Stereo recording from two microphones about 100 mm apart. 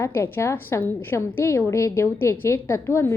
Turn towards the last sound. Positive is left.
turn(degrees=25)  # may be behind; listen again after turning